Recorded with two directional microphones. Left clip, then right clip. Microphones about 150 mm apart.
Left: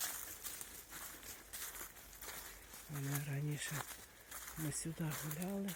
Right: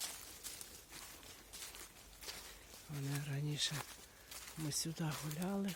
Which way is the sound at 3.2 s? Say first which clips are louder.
Right 4 dB; 10° right (ahead or behind).